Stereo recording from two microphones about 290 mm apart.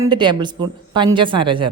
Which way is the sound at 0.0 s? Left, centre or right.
Centre.